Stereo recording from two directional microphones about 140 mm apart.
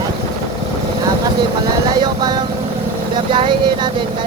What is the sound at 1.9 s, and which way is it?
Speech, 30° right (ahead or behind).